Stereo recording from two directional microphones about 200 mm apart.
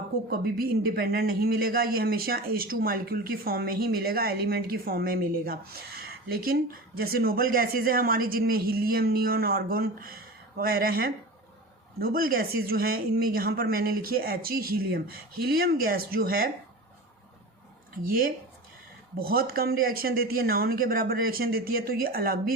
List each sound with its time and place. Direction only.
0.3 s a man's voice: 50° right (ahead or behind)
17.9 s a man's voice: 45° right (ahead or behind)